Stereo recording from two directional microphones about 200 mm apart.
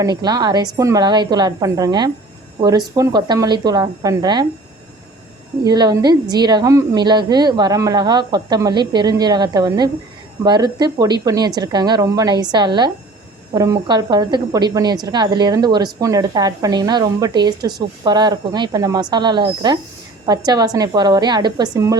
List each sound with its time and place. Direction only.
0.0 s a woman's voice: 20° right (ahead or behind)
5.6 s a woman's voice: 20° right (ahead or behind)